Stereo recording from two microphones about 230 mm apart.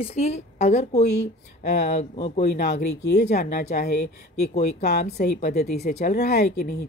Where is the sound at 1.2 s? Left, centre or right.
Left.